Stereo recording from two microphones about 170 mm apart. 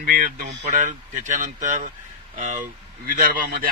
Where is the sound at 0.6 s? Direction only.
45° right (ahead or behind).